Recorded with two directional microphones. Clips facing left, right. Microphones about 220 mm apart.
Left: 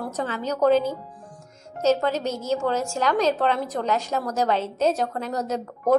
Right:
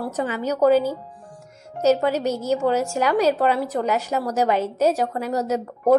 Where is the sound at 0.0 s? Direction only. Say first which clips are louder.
Right 3 dB; 10° right (ahead or behind).